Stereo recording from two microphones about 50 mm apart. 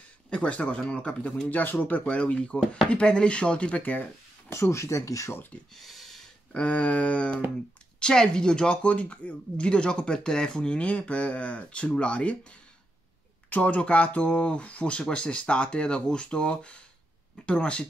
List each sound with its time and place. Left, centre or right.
0.3 s speech: left
1.5 s speech: left
4.5 s speech: left
5.8 s a sound: centre
6.5 s speech: left
8.0 s speech: centre